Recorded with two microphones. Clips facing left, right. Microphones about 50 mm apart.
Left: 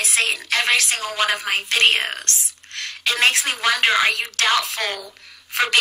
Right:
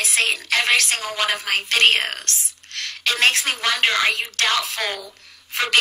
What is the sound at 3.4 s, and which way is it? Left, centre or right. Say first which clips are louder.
Speech: left 1 dB; centre.